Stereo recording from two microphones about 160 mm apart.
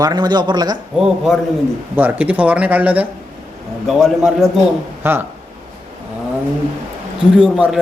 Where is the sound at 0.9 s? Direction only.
5° right (ahead or behind).